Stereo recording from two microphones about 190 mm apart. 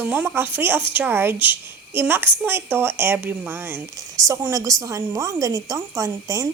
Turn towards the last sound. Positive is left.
turn(degrees=-15)  # may be behind; listen again after turning